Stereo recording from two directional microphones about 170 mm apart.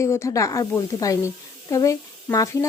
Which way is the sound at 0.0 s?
15° left (ahead or behind).